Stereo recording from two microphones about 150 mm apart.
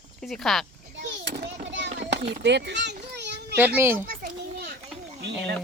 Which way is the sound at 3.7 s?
15° right (ahead or behind).